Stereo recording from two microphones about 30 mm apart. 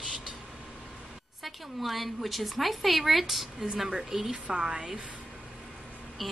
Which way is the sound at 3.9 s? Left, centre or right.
Right.